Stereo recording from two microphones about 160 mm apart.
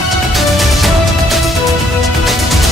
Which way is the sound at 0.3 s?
Centre (ahead or behind).